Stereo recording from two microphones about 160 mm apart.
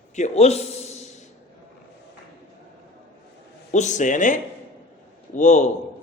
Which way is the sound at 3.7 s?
50° left (ahead or behind).